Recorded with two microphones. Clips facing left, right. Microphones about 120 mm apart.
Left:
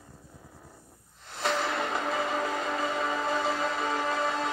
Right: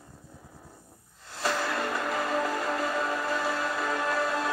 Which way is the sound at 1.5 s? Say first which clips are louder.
Left 1 dB; 20° left (ahead or behind).